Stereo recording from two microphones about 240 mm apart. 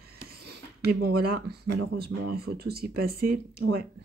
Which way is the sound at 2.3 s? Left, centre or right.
Right.